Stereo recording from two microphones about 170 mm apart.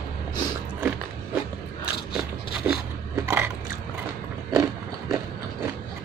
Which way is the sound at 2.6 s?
10° right (ahead or behind).